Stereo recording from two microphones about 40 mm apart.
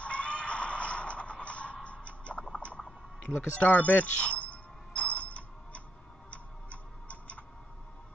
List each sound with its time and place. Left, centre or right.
0.0 s music: left
2.5 s rodents: left
3.3 s music: left
6.3 s tick-tock: left